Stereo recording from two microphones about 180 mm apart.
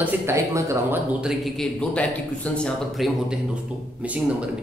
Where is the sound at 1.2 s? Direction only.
Centre (ahead or behind).